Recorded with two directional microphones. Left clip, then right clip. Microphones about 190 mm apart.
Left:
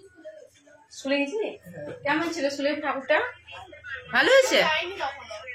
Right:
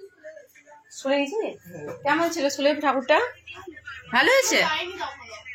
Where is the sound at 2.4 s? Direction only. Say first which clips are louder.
Right 4 dB; 50° right (ahead or behind).